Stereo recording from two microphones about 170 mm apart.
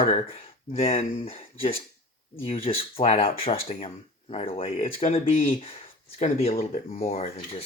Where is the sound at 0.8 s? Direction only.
35° left (ahead or behind).